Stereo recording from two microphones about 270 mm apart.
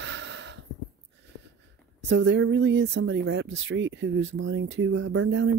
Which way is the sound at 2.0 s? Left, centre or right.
Right.